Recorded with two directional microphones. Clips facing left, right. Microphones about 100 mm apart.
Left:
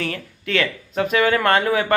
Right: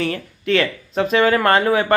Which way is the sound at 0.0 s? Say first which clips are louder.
Right 4 dB; 25° right (ahead or behind).